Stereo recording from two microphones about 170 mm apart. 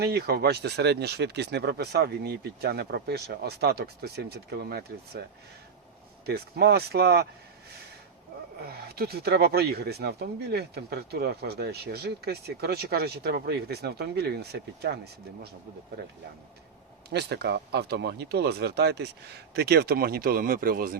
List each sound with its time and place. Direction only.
0.0 s speech: 70° right (ahead or behind)
6.2 s speech: 65° right (ahead or behind)
8.6 s speech: 65° right (ahead or behind)
17.1 s speech: 80° right; by 21.0 s 60° right (ahead or behind)